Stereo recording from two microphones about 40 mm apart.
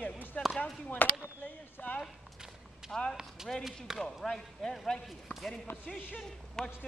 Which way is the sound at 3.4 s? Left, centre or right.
Centre.